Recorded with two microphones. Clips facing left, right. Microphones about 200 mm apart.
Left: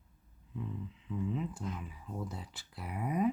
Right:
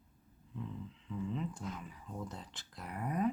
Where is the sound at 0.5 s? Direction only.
5° left (ahead or behind).